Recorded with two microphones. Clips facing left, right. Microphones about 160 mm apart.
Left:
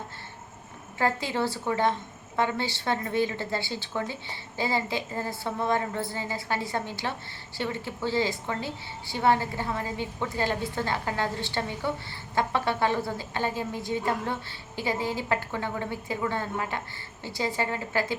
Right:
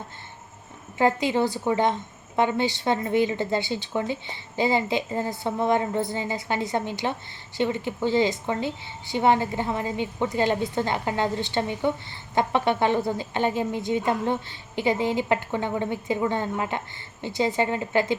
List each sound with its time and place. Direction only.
0.9 s a woman's voice: 20° right (ahead or behind)